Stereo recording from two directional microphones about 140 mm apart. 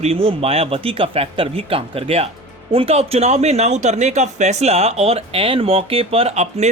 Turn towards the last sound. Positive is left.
turn(degrees=-50)  # may be behind; listen again after turning